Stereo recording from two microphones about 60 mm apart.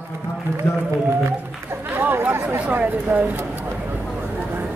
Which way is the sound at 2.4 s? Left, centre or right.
Right.